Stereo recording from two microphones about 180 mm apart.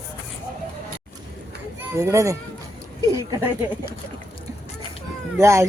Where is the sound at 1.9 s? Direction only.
15° right (ahead or behind).